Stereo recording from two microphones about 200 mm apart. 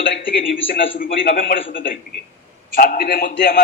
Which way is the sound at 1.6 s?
70° left (ahead or behind).